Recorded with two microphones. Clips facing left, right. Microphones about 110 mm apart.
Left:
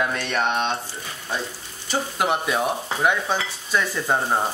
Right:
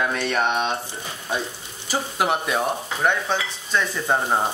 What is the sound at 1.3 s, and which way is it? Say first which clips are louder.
Speech: right 2 dB; 15° right (ahead or behind).